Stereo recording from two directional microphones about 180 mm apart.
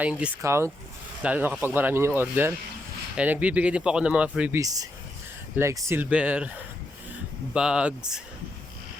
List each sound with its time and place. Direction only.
0.0 s speech: 5° right (ahead or behind)
4.6 s speech: 20° right (ahead or behind)
7.5 s speech: 5° right (ahead or behind)